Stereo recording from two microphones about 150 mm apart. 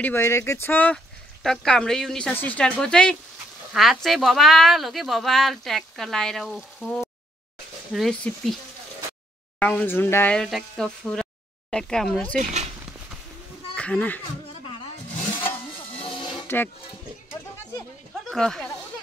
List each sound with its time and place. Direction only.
0.0 s speech: 15° left (ahead or behind)
9.6 s speech: 10° left (ahead or behind)
10.3 s speech: 5° left (ahead or behind)
13.7 s speech: 10° left (ahead or behind)
16.0 s a sound: 35° left (ahead or behind)
16.4 s speech: 15° left (ahead or behind)
18.3 s speech: 5° left (ahead or behind)